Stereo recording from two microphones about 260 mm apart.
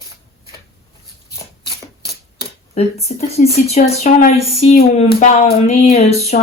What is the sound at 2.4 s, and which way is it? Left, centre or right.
Speech, left.